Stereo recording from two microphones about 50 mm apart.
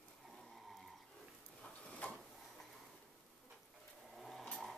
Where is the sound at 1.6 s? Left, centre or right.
Left.